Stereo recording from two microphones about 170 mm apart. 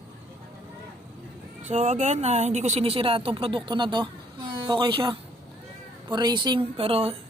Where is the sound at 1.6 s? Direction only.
40° right (ahead or behind).